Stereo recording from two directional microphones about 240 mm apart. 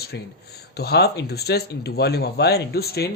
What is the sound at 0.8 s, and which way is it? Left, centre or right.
Speech, left.